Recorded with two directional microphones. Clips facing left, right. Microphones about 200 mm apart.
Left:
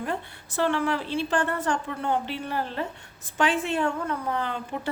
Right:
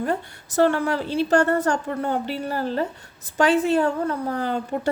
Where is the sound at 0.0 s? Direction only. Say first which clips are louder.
Right 6 dB; 40° right (ahead or behind).